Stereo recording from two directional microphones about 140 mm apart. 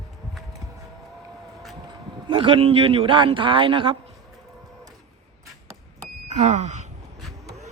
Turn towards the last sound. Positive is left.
turn(degrees=-55)  # may be behind; listen again after turning